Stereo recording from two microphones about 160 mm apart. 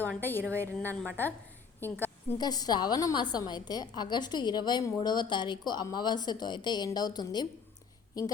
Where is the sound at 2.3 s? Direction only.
25° left (ahead or behind).